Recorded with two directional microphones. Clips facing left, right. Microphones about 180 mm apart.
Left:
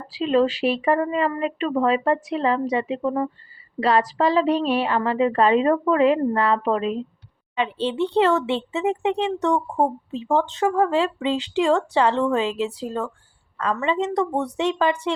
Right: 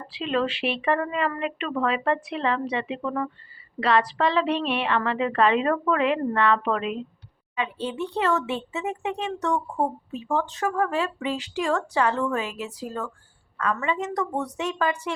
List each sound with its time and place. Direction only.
0.2 s a woman's voice: 35° left (ahead or behind)